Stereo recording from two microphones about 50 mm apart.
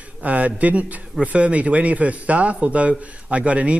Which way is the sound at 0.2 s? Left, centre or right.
Right.